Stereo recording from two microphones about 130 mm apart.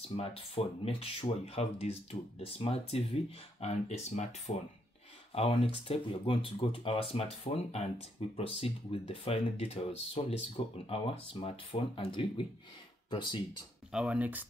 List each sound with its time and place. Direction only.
0.1 s speech: 50° left (ahead or behind)
5.3 s speech: 50° left (ahead or behind)
13.9 s speech: 10° right (ahead or behind)